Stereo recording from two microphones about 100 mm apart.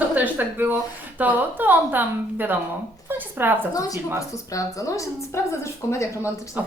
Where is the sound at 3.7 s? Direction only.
35° left (ahead or behind).